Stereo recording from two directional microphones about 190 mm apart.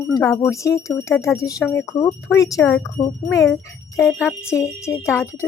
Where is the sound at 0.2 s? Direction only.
10° left (ahead or behind).